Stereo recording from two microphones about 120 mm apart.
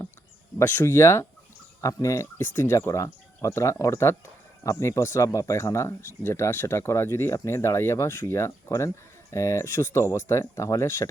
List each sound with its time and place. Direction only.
0.6 s speech: 15° left (ahead or behind)